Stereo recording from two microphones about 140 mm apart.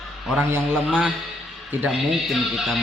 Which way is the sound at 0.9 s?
5° right (ahead or behind).